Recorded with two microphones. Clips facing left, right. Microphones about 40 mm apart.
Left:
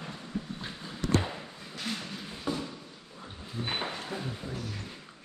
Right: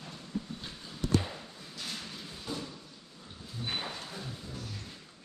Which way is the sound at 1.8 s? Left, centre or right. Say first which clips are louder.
Left 5 dB; left.